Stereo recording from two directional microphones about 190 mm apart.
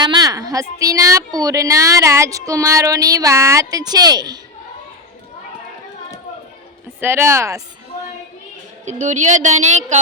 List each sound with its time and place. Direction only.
0.0 s a woman's voice: 20° right (ahead or behind)
7.0 s a woman's voice: 10° right (ahead or behind)
8.8 s a woman's voice: 40° right (ahead or behind)